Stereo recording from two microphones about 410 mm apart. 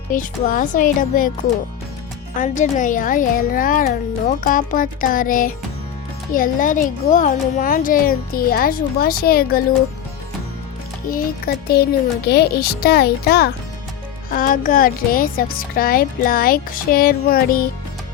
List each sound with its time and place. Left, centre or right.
0.1 s speech: centre
2.4 s speech: centre
11.1 s speech: left